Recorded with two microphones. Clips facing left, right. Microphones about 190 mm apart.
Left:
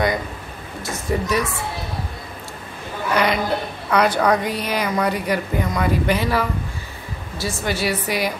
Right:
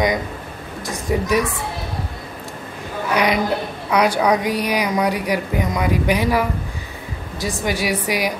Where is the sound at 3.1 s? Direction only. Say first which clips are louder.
Right 1 dB; 15° right (ahead or behind).